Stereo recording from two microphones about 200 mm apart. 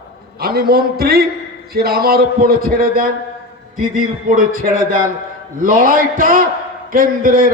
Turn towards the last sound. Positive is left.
turn(degrees=-45)  # may be behind; listen again after turning